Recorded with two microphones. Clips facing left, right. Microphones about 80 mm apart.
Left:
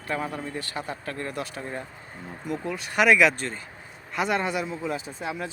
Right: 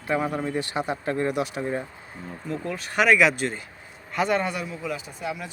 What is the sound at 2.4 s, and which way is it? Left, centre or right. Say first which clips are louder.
Speech: even; centre.